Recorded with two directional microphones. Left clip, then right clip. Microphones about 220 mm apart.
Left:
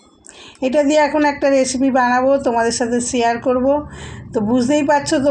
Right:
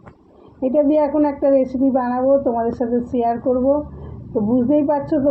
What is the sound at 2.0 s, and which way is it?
Speech, 30° left (ahead or behind).